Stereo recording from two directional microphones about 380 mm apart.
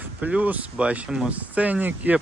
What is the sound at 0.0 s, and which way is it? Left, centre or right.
Speech, centre.